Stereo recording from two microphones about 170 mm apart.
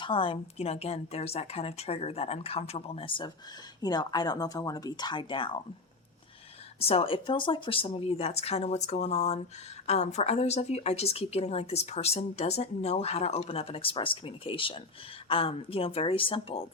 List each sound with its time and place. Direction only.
0.0 s speech: 30° left (ahead or behind)
6.7 s speech: 35° left (ahead or behind)